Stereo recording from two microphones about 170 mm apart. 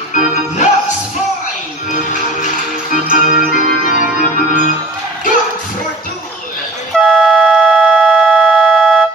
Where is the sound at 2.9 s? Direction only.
50° left (ahead or behind).